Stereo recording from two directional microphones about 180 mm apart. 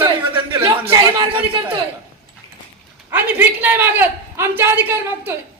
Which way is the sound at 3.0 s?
10° right (ahead or behind).